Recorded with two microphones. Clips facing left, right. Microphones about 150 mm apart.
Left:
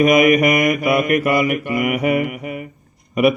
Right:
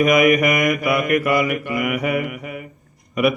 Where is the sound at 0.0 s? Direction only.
25° left (ahead or behind).